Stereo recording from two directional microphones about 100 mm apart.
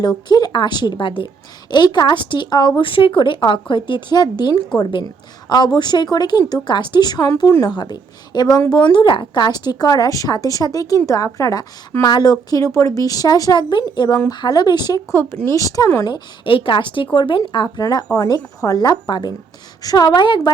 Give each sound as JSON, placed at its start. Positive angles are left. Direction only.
{"t": 0.3, "sound": "speech", "side_deg": 45}
{"t": 1.7, "sound": "speech", "side_deg": 45}
{"t": 15.1, "sound": "speech", "side_deg": 25}
{"t": 15.5, "sound": "speech", "side_deg": 35}
{"t": 16.5, "sound": "speech", "side_deg": 60}